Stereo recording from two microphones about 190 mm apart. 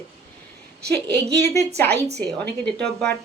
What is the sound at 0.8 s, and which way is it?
Speech, 60° right (ahead or behind).